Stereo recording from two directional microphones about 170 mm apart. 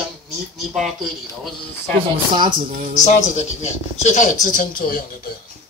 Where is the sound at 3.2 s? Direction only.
45° left (ahead or behind).